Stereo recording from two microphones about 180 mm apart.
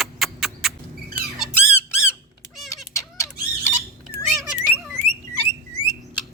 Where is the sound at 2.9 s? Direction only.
15° left (ahead or behind).